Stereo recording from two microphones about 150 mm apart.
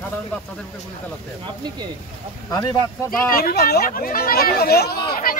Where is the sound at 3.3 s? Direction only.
85° left.